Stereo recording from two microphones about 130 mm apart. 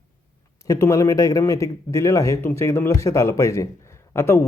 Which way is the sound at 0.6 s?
25° left (ahead or behind).